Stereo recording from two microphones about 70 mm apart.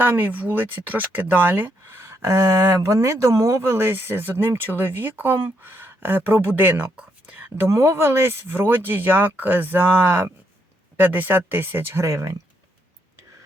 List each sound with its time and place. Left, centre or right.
0.0 s speech: right
6.9 s whispering: centre
7.7 s speech: right